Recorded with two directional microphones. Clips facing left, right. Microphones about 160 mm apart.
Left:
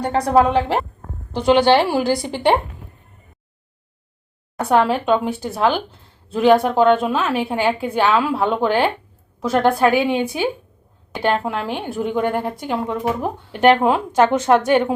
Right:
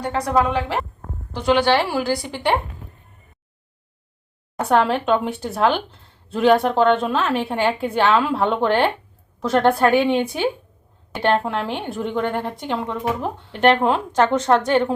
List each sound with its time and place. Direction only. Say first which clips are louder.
0.0 s a woman's voice: left 4 dB; 25° left (ahead or behind)
4.7 s a woman's voice: left 1 dB; 5° left (ahead or behind)